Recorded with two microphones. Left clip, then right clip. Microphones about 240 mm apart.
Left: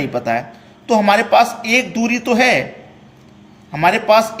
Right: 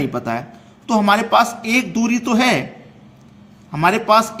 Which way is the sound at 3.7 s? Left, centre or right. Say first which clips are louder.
Left 2 dB; right.